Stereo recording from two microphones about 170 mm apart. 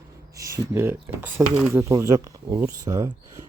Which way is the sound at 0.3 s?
20° right (ahead or behind).